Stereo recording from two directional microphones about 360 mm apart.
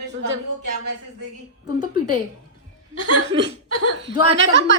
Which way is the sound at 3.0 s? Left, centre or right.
Right.